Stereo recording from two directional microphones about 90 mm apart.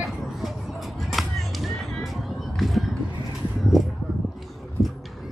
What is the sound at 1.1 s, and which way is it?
Music, centre (ahead or behind).